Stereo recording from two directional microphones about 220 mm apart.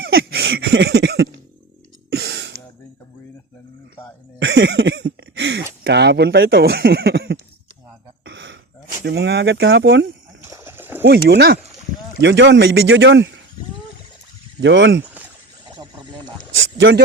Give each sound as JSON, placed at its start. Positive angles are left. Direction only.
{"t": 0.0, "sound": "a sound", "side_deg": -45}
{"t": 2.1, "sound": "throat clearing", "side_deg": -50}
{"t": 4.4, "sound": "speech", "side_deg": -55}
{"t": 8.2, "sound": "a sound", "side_deg": -55}
{"t": 9.0, "sound": "speech", "side_deg": -50}
{"t": 10.4, "sound": "a sound", "side_deg": -10}
{"t": 11.0, "sound": "a man's voice", "side_deg": -50}
{"t": 14.6, "sound": "speech", "side_deg": -55}
{"t": 15.7, "sound": "snake", "side_deg": -20}
{"t": 16.6, "sound": "a man's voice", "side_deg": -55}